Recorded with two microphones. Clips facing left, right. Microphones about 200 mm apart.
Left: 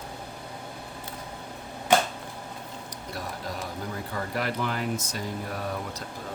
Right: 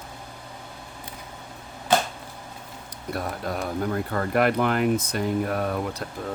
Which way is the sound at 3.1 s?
60° right (ahead or behind).